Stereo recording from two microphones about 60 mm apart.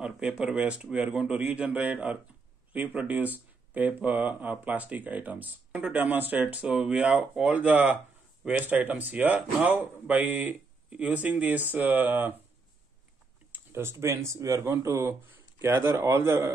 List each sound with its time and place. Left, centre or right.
0.0 s speech: centre; by 12.4 s right
13.7 s a man's voice: right
15.6 s a man's voice: right